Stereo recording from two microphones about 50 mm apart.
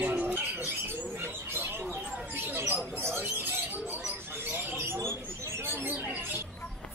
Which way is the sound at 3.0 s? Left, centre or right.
Right.